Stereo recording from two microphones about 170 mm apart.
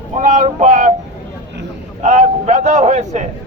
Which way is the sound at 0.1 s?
45° right (ahead or behind).